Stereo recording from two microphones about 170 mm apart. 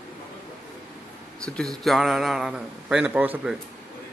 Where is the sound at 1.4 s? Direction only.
5° left (ahead or behind).